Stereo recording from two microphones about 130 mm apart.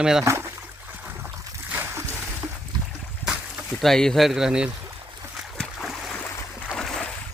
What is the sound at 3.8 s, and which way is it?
Speech, 5° left (ahead or behind).